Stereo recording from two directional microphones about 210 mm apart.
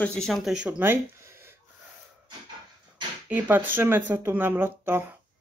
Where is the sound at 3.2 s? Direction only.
5° right (ahead or behind).